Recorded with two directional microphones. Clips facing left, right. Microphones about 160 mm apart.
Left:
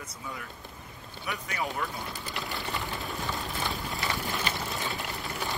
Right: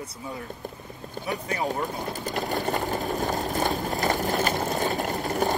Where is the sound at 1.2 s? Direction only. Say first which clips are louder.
Right 6 dB; 35° right (ahead or behind).